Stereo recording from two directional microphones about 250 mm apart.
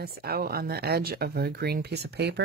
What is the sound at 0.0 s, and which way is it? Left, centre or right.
Speech, right.